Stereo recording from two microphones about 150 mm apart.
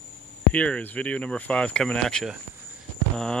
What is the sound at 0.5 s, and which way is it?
Speech, 10° left (ahead or behind).